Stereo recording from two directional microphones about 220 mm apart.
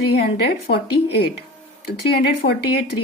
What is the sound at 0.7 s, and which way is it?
Speech, 45° left (ahead or behind).